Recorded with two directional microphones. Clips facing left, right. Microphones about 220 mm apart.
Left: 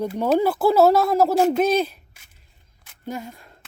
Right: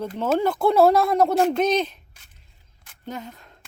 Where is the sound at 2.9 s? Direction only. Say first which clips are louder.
Left 3 dB; 10° left (ahead or behind).